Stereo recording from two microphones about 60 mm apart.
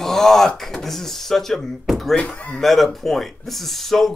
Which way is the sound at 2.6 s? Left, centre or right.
Centre.